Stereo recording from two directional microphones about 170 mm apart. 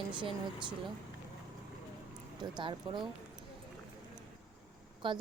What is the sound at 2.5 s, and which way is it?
Speech, 30° right (ahead or behind).